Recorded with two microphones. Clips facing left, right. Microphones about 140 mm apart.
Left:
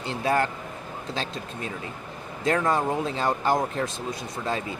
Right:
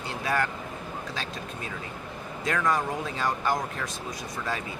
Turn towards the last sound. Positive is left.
turn(degrees=25)  # may be behind; listen again after turning